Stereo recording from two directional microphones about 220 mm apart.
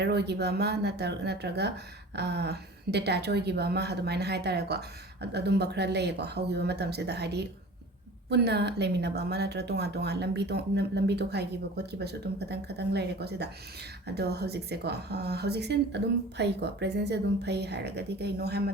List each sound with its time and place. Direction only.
0.0 s a woman's voice: 50° right (ahead or behind)